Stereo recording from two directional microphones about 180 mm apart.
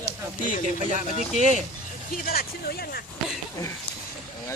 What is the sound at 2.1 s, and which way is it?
Speech, 55° left (ahead or behind).